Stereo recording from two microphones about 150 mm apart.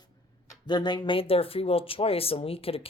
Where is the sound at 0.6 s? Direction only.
30° left (ahead or behind).